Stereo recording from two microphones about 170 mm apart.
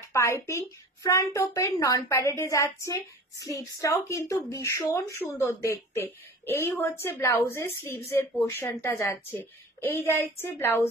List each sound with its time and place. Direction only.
0.1 s a woman's voice: 15° left (ahead or behind)